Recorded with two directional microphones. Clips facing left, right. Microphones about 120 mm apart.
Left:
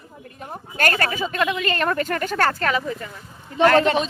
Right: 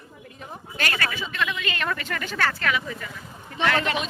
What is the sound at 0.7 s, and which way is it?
Speech, 45° left (ahead or behind).